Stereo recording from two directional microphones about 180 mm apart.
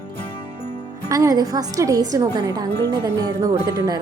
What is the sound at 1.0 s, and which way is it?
A woman's voice, 20° right (ahead or behind).